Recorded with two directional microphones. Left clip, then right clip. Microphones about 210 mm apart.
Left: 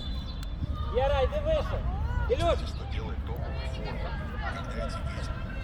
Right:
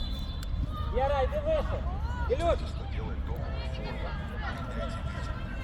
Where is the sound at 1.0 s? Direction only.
40° left (ahead or behind).